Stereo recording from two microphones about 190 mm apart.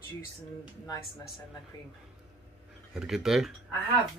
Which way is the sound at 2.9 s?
5° right (ahead or behind).